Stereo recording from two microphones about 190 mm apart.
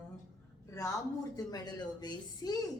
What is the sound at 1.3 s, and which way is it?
A woman's voice, 20° left (ahead or behind).